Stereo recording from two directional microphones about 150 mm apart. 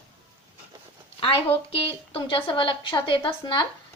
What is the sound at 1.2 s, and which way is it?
A woman's voice, 35° left (ahead or behind).